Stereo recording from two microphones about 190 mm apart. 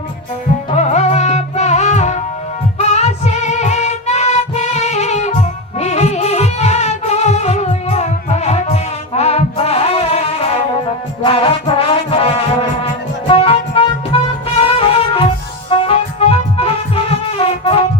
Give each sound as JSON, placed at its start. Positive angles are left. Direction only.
{"t": 0.8, "sound": "music", "side_deg": 35}